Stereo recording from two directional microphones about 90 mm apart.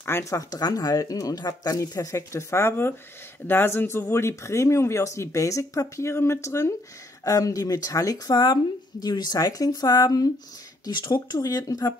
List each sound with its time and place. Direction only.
0.0 s speech: 25° left (ahead or behind)
0.3 s speech: 45° left (ahead or behind)
10.9 s speech: 55° left (ahead or behind)
11.2 s speech: 45° left (ahead or behind)